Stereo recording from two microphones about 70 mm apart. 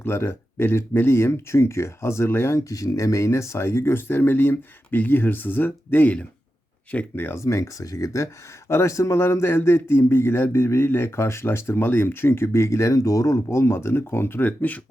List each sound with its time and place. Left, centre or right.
0.0 s a man's voice: left
2.6 s a man's voice: left
7.3 s a man's voice: left